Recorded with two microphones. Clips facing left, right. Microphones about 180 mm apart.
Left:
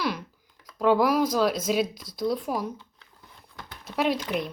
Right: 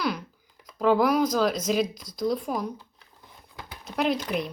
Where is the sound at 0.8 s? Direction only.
Centre (ahead or behind).